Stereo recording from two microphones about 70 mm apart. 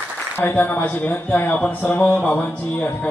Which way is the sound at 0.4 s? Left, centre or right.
Left.